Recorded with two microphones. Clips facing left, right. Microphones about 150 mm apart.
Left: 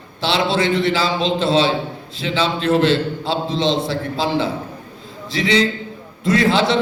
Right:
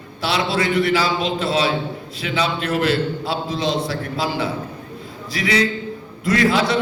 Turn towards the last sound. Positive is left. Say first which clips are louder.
# left 2 dB
turn(degrees=25)  # may be behind; listen again after turning